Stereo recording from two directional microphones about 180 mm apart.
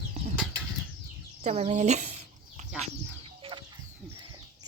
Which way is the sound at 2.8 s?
30° right (ahead or behind).